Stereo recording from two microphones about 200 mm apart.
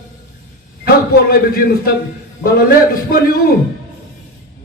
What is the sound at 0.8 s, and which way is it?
A man's voice, 50° left (ahead or behind).